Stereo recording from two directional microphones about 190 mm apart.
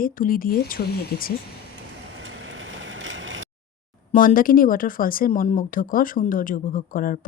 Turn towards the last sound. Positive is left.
turn(degrees=45)  # may be behind; listen again after turning